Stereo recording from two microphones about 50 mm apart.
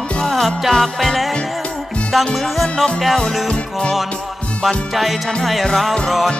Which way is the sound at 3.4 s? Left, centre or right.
Centre.